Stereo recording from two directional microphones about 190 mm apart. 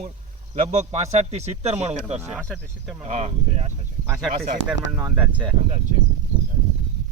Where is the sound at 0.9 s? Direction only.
35° right (ahead or behind).